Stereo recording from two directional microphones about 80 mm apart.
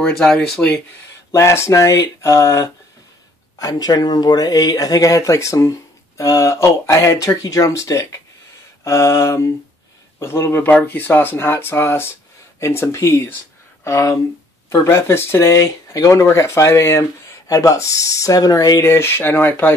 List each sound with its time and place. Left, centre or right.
0.0 s speech: centre
1.3 s speech: left
18.8 s speech: left